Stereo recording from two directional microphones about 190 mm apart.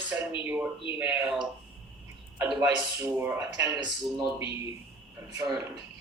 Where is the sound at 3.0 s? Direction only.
10° right (ahead or behind).